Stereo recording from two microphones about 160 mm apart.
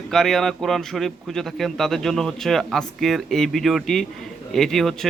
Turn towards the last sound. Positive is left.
turn(degrees=0)  # may be behind; listen again after turning